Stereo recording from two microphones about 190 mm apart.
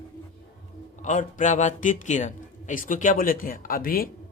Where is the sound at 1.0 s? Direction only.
40° left (ahead or behind).